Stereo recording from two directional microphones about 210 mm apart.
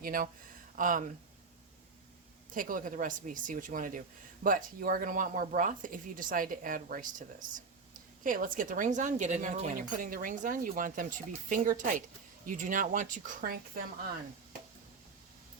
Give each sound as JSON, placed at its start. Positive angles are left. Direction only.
{"t": 0.0, "sound": "speech", "side_deg": -40}
{"t": 2.5, "sound": "speech", "side_deg": -40}